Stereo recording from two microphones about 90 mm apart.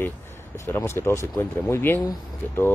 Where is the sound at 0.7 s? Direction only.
30° left (ahead or behind).